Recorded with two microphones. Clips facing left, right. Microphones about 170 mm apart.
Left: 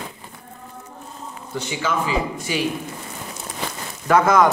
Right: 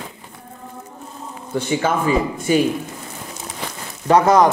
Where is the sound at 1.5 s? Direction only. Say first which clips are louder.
Right 5 dB; 50° right (ahead or behind).